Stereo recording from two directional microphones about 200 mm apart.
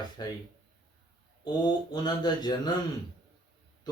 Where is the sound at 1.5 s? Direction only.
20° left (ahead or behind).